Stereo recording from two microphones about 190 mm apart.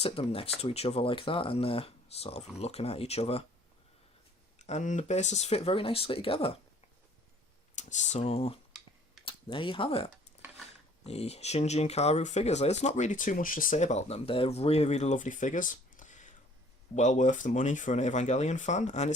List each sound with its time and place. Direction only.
0.0 s speech: 30° left (ahead or behind)
4.6 s speech: 40° left (ahead or behind)
7.8 s speech: 40° left (ahead or behind)